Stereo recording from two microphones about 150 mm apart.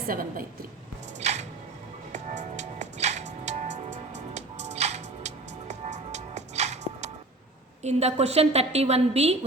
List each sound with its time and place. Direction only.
0.1 s a woman's voice: 75° right (ahead or behind)
1.2 s music: 50° right (ahead or behind)
7.8 s a woman's voice: 45° right (ahead or behind)